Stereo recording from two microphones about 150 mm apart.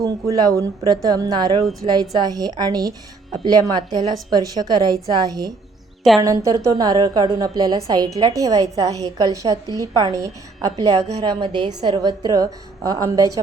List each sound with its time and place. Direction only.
0.0 s a woman's voice: 20° right (ahead or behind)